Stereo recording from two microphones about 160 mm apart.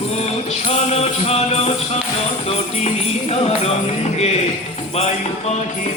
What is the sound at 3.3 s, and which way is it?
Music, 40° left (ahead or behind).